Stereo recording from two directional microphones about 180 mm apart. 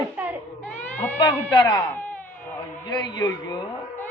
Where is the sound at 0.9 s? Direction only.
10° left (ahead or behind).